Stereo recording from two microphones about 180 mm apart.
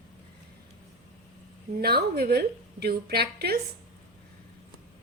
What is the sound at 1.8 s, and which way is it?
A woman's voice, 60° right (ahead or behind).